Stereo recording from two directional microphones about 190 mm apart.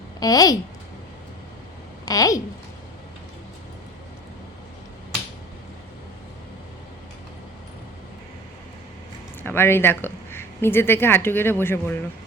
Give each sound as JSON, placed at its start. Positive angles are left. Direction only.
{"t": 0.2, "sound": "a child's voice", "side_deg": 20}
{"t": 2.0, "sound": "a child's voice", "side_deg": 20}
{"t": 9.4, "sound": "speech", "side_deg": 10}